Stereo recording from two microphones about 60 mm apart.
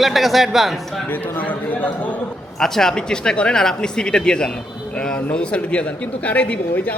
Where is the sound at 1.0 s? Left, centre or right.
Left.